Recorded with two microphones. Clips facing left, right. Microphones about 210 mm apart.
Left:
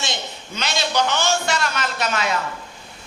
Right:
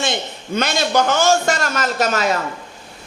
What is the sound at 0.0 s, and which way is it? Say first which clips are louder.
A man's voice: right 6 dB; 55° right (ahead or behind).